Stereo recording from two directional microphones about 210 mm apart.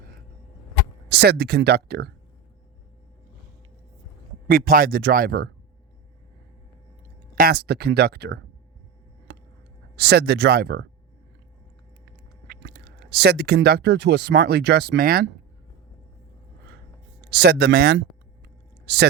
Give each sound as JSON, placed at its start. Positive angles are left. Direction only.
{"t": 1.0, "sound": "speech", "side_deg": -50}
{"t": 4.4, "sound": "speech", "side_deg": -45}
{"t": 7.3, "sound": "speech", "side_deg": -50}
{"t": 9.3, "sound": "a sound", "side_deg": -55}
{"t": 9.9, "sound": "speech", "side_deg": -50}
{"t": 12.5, "sound": "speech", "side_deg": -50}
{"t": 17.2, "sound": "speech", "side_deg": -50}